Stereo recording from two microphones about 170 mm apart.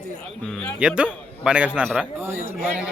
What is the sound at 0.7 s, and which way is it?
A man's voice, 5° right (ahead or behind).